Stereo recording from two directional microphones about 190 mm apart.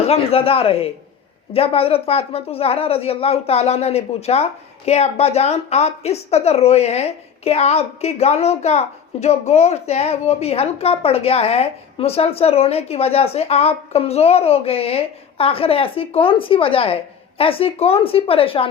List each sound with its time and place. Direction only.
0.1 s a woman's voice: 30° left (ahead or behind)